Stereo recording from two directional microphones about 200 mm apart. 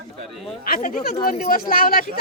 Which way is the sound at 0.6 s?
45° left (ahead or behind).